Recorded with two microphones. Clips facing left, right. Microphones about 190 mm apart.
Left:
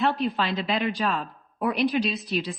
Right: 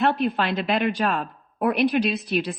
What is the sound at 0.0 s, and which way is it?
A woman's voice, 60° right (ahead or behind).